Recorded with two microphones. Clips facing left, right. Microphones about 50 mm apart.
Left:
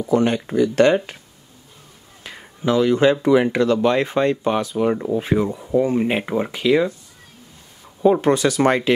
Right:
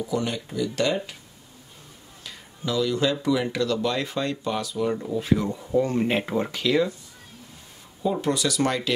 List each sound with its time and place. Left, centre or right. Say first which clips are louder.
0.0 s speech: left 9 dB; left
2.2 s speech: left 9 dB; left
5.5 s speech: left 4 dB; centre
8.0 s speech: left 9 dB; left